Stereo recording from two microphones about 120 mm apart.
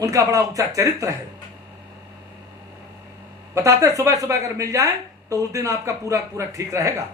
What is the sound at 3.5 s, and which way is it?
A man's voice, 25° right (ahead or behind).